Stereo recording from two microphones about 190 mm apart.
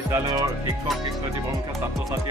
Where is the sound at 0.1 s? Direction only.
20° right (ahead or behind).